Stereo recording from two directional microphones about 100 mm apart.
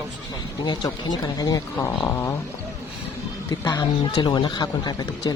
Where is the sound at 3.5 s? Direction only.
35° left (ahead or behind).